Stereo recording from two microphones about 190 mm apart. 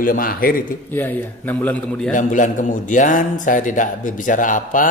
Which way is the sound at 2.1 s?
45° left (ahead or behind).